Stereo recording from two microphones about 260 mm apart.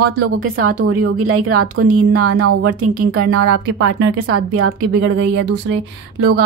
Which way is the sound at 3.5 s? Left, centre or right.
Right.